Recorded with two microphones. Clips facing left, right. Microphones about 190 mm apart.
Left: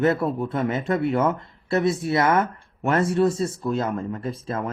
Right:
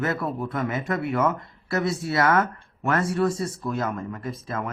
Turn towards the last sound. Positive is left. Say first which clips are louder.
# left 3 dB
turn(degrees=30)  # may be behind; listen again after turning